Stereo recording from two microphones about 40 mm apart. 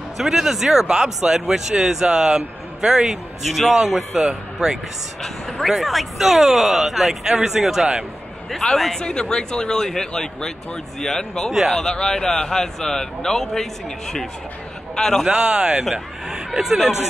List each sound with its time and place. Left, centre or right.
0.2 s a man's voice: centre
3.5 s speech: centre
4.3 s speech: centre
5.2 s speech: centre
8.5 s speech: centre
9.0 s a man's voice: centre
15.0 s a man's voice: centre
15.2 s a man's voice: centre